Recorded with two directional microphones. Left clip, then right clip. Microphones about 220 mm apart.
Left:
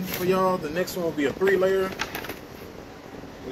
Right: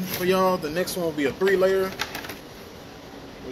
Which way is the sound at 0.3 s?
45° right (ahead or behind).